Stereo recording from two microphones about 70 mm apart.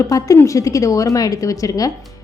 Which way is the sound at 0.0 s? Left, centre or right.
Left.